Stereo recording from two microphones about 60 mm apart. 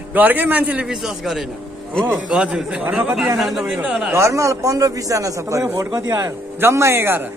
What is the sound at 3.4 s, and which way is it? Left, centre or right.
Speech, centre.